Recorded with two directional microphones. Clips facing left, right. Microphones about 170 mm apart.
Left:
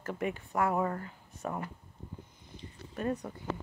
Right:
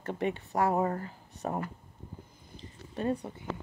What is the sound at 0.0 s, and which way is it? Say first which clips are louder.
Speech: right 3 dB; 30° right (ahead or behind).